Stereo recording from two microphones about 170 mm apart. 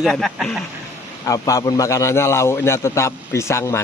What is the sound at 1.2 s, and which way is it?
A man's voice, 20° left (ahead or behind).